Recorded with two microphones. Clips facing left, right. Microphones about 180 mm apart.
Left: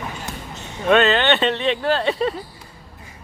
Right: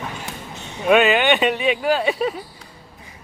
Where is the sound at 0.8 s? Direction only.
10° right (ahead or behind).